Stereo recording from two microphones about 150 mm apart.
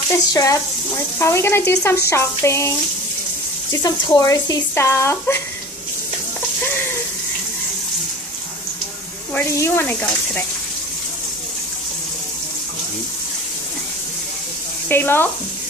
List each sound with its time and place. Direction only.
0.3 s speech: 25° left (ahead or behind)
1.2 s sizzle: 15° left (ahead or behind)
2.0 s speech: 20° left (ahead or behind)
3.7 s speech: 25° left (ahead or behind)
9.3 s sizzle: 15° left (ahead or behind)
14.9 s sizzle: 15° left (ahead or behind)